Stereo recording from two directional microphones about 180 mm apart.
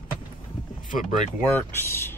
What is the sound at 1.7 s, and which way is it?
Speech, 15° left (ahead or behind).